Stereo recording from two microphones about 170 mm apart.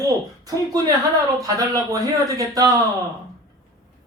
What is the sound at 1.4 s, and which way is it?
Speech, 20° right (ahead or behind).